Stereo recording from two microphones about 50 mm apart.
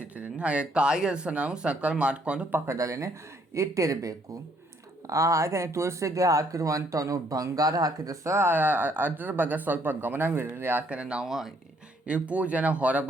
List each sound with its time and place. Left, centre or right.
0.1 s speech: right
2.6 s speech: right
5.0 s speech: right
8.4 s speech: right
10.8 s speech: right
11.3 s speech: centre
12.0 s speech: right